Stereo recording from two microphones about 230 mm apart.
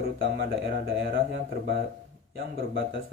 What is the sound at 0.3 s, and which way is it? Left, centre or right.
Speech, right.